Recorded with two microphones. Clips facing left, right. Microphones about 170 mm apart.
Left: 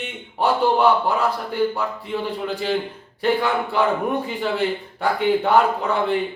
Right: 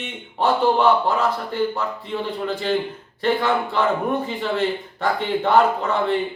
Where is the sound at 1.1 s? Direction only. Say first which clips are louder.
Even; 10° left (ahead or behind).